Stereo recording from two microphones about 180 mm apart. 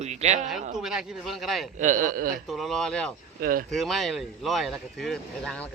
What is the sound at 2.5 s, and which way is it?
Speech, centre (ahead or behind).